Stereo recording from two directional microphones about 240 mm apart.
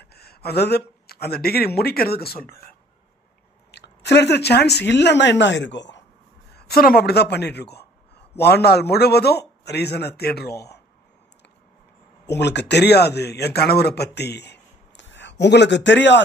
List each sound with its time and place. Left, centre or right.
0.0 s speech: left
3.7 s a woman's voice: left
12.3 s speech: left